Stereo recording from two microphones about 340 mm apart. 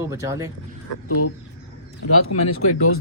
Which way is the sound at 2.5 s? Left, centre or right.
Left.